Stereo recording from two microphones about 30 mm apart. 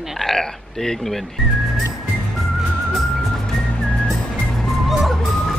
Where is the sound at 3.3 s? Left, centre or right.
Centre.